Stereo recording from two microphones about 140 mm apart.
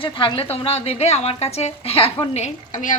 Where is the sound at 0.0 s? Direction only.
35° left (ahead or behind).